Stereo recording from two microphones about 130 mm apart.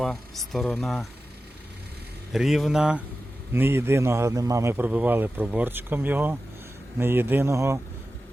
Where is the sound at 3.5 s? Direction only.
15° right (ahead or behind).